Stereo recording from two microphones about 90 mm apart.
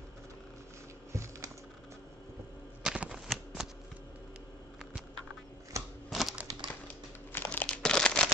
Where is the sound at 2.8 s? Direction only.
10° right (ahead or behind).